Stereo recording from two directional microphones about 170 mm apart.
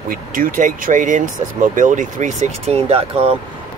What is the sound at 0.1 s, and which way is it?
Speech, 55° right (ahead or behind).